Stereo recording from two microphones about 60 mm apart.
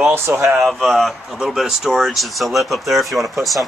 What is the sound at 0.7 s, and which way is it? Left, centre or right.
Speech, centre.